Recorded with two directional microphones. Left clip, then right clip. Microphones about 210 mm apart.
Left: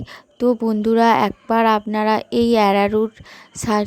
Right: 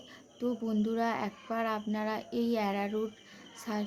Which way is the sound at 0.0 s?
45° left (ahead or behind).